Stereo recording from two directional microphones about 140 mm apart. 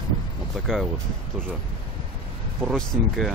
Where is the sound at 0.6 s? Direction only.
Centre (ahead or behind).